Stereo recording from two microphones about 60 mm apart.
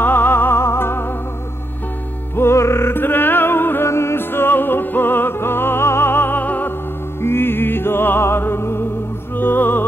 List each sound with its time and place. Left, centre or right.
0.0 s music: left
2.3 s music: left
3.8 s music: left
7.2 s music: left